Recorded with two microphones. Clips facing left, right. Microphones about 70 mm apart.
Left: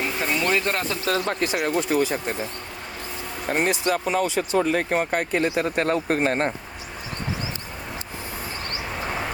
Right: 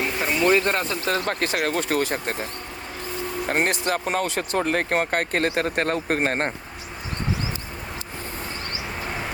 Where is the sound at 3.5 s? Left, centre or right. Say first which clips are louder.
Left 2 dB; right.